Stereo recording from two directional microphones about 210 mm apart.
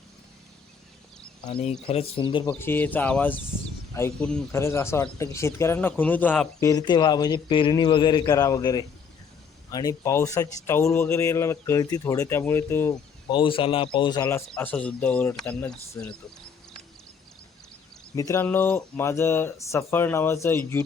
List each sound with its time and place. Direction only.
1.5 s speech: 30° left (ahead or behind)
2.5 s speech: 10° left (ahead or behind)
6.7 s speech: 20° left (ahead or behind)
13.3 s speech: 25° left (ahead or behind); by 16.1 s 5° left (ahead or behind)
18.1 s speech: 15° left (ahead or behind)